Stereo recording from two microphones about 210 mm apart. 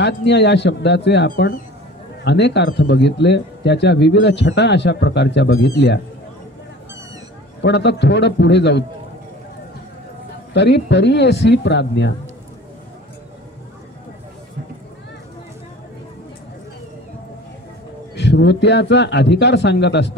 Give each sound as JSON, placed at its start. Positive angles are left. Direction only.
{"t": 0.0, "sound": "speech", "side_deg": 55}
{"t": 7.6, "sound": "speech", "side_deg": 55}
{"t": 10.5, "sound": "speech", "side_deg": 55}
{"t": 18.1, "sound": "speech", "side_deg": 55}